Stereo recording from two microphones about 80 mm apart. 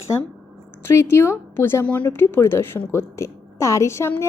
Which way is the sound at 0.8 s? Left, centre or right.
Left.